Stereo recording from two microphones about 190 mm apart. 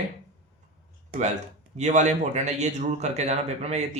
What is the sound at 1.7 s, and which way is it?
Speech, 40° right (ahead or behind).